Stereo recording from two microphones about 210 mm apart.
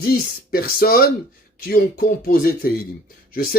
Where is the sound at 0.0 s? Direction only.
45° left (ahead or behind).